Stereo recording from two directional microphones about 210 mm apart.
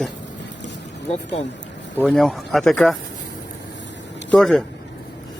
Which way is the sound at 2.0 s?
Centre (ahead or behind).